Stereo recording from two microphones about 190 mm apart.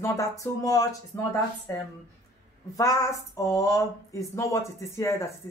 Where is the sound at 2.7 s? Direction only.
15° left (ahead or behind).